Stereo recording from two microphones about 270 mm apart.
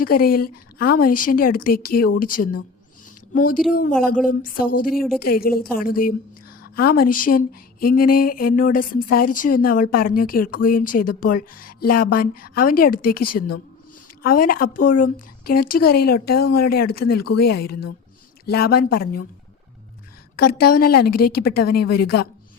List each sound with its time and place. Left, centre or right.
0.0 s speech: left
3.6 s speech: centre
4.3 s speech: left
20.6 s speech: left